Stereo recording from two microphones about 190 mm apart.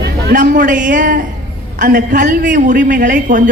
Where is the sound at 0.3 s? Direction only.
45° right (ahead or behind).